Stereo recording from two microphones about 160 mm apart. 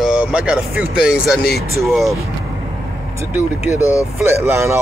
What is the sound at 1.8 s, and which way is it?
Speech, centre (ahead or behind).